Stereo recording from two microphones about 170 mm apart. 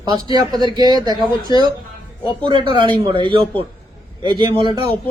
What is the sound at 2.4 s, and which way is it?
Speech, 30° right (ahead or behind).